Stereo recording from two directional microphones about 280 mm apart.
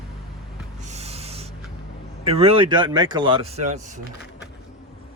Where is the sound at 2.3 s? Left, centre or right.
Right.